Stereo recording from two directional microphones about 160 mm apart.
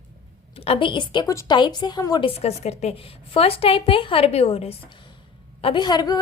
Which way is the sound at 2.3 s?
40° left (ahead or behind).